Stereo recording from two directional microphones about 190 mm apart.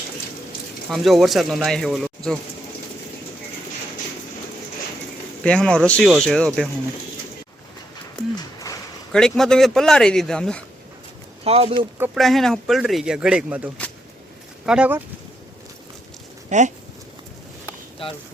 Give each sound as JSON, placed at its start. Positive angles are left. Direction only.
{"t": 0.9, "sound": "speech", "side_deg": 0}
{"t": 5.4, "sound": "speech", "side_deg": 5}
{"t": 8.4, "sound": "a sound", "side_deg": 20}
{"t": 9.1, "sound": "speech", "side_deg": 0}
{"t": 11.4, "sound": "speech", "side_deg": -30}
{"t": 12.1, "sound": "speech", "side_deg": 0}
{"t": 14.7, "sound": "speech", "side_deg": -5}
{"t": 16.5, "sound": "speech", "side_deg": -40}
{"t": 18.0, "sound": "speech", "side_deg": 30}